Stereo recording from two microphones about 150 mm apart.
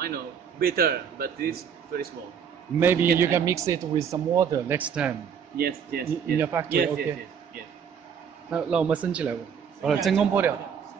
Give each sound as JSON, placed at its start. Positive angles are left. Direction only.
{"t": 0.0, "sound": "a man's voice", "side_deg": -90}
{"t": 2.8, "sound": "speech", "side_deg": -15}
{"t": 4.7, "sound": "speech", "side_deg": -10}
{"t": 5.6, "sound": "a man's voice", "side_deg": -90}
{"t": 6.3, "sound": "speech", "side_deg": -15}
{"t": 8.5, "sound": "a man's voice", "side_deg": -5}
{"t": 10.1, "sound": "speech", "side_deg": -10}